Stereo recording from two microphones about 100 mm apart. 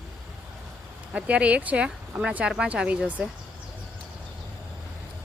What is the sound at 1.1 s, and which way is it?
Speech, 10° right (ahead or behind).